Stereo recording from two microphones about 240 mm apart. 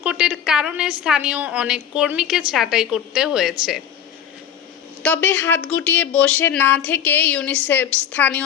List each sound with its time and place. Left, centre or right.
0.0 s a woman's voice: centre
5.0 s speech: centre